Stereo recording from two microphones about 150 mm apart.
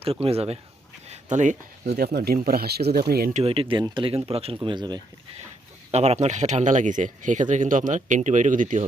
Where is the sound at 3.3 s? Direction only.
40° right (ahead or behind).